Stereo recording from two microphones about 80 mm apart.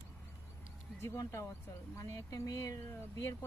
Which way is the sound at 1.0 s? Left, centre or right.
Left.